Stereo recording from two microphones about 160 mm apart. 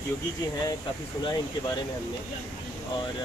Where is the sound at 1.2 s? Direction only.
25° left (ahead or behind).